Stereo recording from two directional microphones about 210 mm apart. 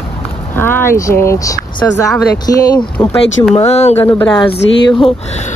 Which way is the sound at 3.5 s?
30° left (ahead or behind).